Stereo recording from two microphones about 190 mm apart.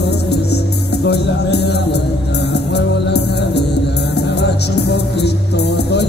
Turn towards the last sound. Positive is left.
turn(degrees=60)  # may be behind; listen again after turning